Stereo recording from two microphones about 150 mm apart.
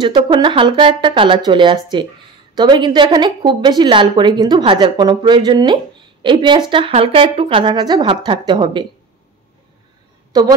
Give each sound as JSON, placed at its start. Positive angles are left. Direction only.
{"t": 0.0, "sound": "a woman's voice", "side_deg": -30}
{"t": 10.3, "sound": "speech", "side_deg": -25}